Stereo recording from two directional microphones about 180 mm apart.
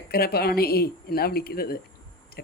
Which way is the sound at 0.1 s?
60° left (ahead or behind).